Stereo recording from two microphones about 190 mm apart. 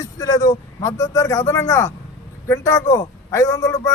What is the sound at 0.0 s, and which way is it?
A man's voice, 20° left (ahead or behind).